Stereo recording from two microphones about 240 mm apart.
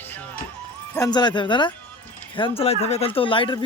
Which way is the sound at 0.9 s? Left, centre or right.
Centre.